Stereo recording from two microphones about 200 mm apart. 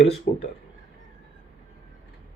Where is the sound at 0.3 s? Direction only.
40° left (ahead or behind).